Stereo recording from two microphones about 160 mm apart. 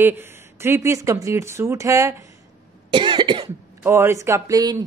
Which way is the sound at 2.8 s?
30° right (ahead or behind).